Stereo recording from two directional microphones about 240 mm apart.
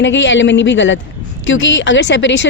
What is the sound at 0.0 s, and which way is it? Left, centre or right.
Speech, left.